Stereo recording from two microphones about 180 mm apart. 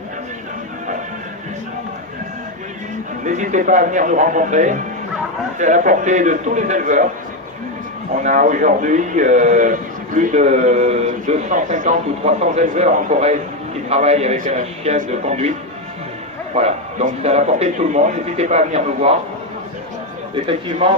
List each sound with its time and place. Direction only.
3.2 s speech: 45° right (ahead or behind)
8.1 s speech: 45° right (ahead or behind)
16.6 s speech: 40° right (ahead or behind)
20.3 s speech: 30° right (ahead or behind)